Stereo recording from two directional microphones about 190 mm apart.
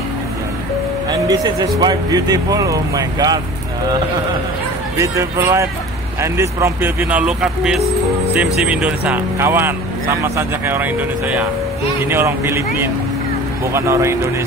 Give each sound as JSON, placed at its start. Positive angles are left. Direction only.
{"t": 1.8, "sound": "speech", "side_deg": -20}
{"t": 4.9, "sound": "speech", "side_deg": -15}
{"t": 12.0, "sound": "speech", "side_deg": -10}